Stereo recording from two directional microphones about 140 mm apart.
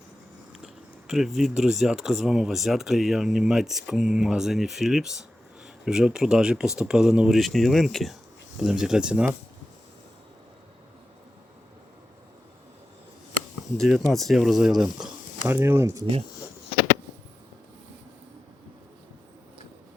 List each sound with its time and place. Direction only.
0.6 s speech: centre (ahead or behind)
13.7 s speech: centre (ahead or behind)
15.4 s speech: 15° right (ahead or behind)